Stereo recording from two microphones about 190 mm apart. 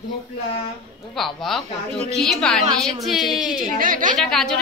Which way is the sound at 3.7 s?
45° right (ahead or behind).